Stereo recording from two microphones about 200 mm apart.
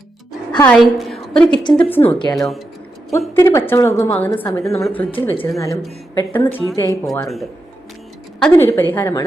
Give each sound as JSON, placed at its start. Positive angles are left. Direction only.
{"t": 0.7, "sound": "a woman's voice", "side_deg": 0}
{"t": 2.1, "sound": "speech", "side_deg": 20}
{"t": 2.4, "sound": "speech", "side_deg": 0}
{"t": 3.1, "sound": "a woman's voice", "side_deg": 15}
{"t": 8.4, "sound": "a woman's voice", "side_deg": 10}